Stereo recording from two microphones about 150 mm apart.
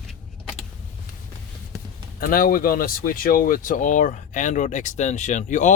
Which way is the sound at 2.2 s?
75° left (ahead or behind).